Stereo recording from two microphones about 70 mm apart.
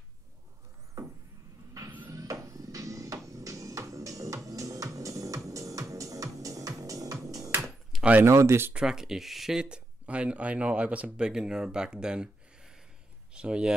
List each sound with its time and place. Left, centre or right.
2.1 s music: right
8.0 s speech: right
8.3 s speech: right
8.7 s speech: centre